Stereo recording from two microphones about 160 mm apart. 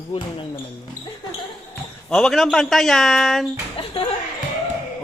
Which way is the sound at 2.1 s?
Centre (ahead or behind).